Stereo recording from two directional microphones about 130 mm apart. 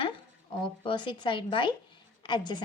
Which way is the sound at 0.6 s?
40° left (ahead or behind).